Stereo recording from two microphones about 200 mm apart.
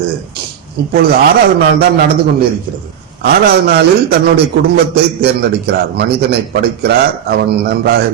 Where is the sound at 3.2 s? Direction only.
50° right (ahead or behind).